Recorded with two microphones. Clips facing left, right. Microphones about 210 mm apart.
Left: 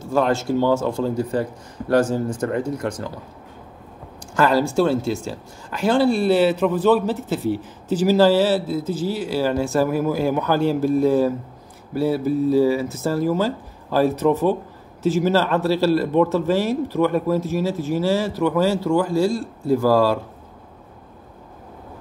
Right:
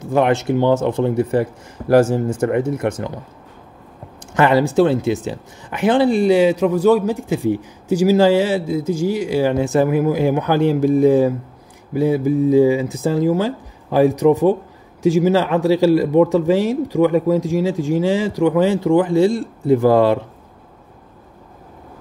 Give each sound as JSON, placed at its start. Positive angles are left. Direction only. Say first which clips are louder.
{"t": 0.0, "sound": "speech", "louder": "right 3 dB", "side_deg": -20}
{"t": 4.6, "sound": "speech", "louder": "right 4 dB", "side_deg": -20}